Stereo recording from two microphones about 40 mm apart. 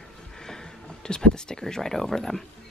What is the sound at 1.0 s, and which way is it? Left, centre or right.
Speech, centre.